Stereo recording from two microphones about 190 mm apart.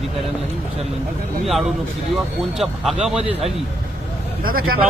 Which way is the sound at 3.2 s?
30° right (ahead or behind).